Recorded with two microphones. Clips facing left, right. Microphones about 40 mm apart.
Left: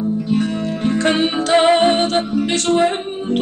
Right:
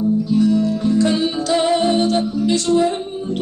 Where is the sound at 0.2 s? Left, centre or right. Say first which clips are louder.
Right 3 dB; left.